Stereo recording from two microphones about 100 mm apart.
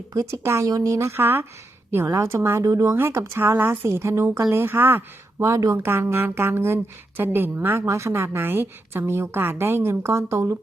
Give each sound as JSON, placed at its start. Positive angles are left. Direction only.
{"t": 0.1, "sound": "a woman's voice", "side_deg": -30}